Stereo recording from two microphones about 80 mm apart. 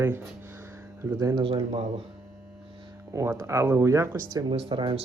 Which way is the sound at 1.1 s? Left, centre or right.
Right.